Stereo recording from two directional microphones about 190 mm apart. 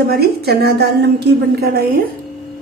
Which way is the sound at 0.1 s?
55° right (ahead or behind).